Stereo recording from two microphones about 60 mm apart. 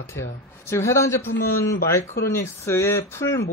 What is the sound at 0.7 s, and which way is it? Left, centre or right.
A man's voice, left.